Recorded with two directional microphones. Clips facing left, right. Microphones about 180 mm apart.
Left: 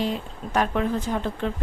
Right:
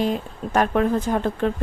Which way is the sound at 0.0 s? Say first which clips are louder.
Right 4 dB; 45° right (ahead or behind).